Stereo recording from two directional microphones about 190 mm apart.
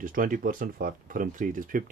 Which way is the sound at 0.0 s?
45° right (ahead or behind).